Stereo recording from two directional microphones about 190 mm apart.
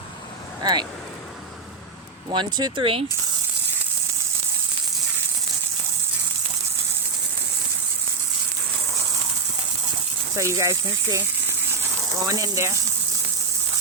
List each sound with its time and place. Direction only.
0.6 s speech: 20° right (ahead or behind)
2.3 s speech: 25° right (ahead or behind)
10.3 s speech: 15° right (ahead or behind)